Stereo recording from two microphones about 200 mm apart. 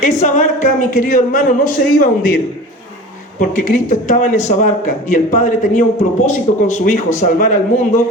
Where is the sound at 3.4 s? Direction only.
40° left (ahead or behind).